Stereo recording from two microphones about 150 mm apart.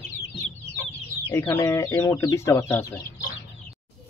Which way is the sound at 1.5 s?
20° left (ahead or behind).